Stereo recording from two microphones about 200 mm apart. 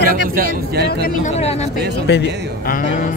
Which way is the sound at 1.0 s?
35° left (ahead or behind).